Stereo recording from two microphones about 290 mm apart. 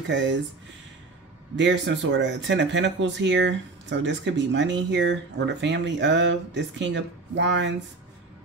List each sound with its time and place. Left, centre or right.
0.1 s speech: right
1.6 s speech: right